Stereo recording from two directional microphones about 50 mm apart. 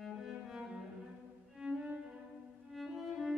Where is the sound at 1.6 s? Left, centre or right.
Centre.